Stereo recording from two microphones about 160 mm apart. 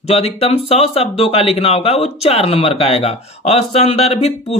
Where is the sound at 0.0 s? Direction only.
40° left (ahead or behind).